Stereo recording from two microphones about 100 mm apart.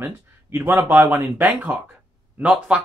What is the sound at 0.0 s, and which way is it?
Speech, 20° right (ahead or behind).